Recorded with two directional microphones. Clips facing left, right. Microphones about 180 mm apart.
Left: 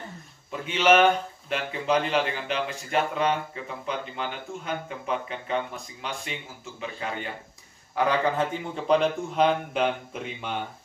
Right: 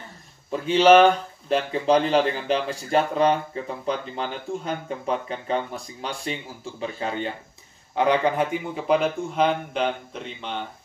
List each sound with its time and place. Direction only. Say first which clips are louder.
0.5 s a man's voice: right 6 dB; 35° right (ahead or behind)
8.7 s a man's voice: even; 5° right (ahead or behind)